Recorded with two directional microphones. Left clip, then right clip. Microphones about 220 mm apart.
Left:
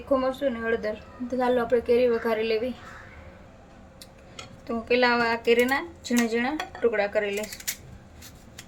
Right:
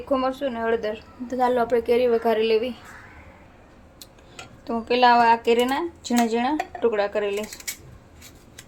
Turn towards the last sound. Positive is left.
turn(degrees=-20)  # may be behind; listen again after turning